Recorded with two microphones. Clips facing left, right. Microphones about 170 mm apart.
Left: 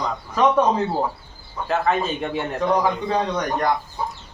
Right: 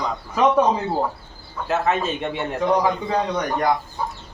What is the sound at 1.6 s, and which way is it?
A man's voice, 5° right (ahead or behind).